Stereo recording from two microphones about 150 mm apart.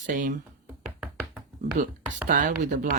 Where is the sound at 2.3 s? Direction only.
60° right (ahead or behind).